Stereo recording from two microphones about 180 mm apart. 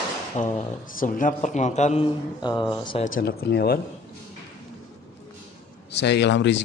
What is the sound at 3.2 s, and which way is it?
Speech, 60° left (ahead or behind).